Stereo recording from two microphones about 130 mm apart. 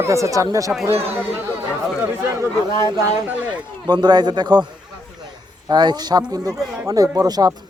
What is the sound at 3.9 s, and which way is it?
Speech, 30° right (ahead or behind).